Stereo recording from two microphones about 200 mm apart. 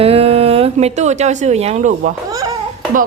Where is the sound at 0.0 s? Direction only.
30° right (ahead or behind).